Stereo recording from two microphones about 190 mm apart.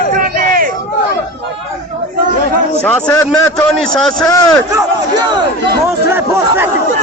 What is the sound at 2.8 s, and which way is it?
Speech, 10° left (ahead or behind).